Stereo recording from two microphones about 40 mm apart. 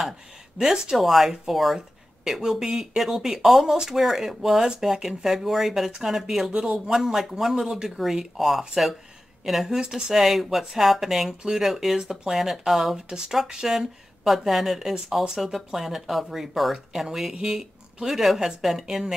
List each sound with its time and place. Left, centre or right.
0.6 s speech: centre
0.9 s speech: centre